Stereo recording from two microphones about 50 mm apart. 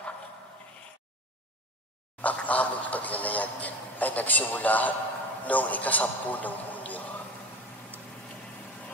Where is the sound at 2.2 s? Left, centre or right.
Left.